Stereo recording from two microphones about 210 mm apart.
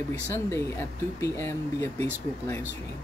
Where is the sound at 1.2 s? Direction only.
15° left (ahead or behind).